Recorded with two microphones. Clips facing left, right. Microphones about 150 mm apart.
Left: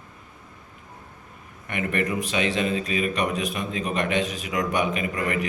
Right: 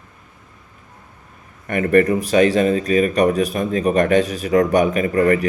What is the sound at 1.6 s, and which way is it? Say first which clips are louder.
Speech: right 11 dB; 45° right (ahead or behind).